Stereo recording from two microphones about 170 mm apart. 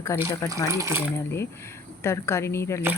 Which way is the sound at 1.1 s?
15° left (ahead or behind).